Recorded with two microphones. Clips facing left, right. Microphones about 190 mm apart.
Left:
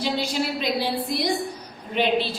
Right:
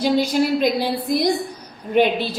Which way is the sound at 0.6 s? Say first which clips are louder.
Right 5 dB; 45° right (ahead or behind).